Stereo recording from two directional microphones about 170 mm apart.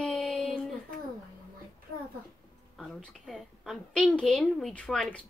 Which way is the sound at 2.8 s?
5° left (ahead or behind).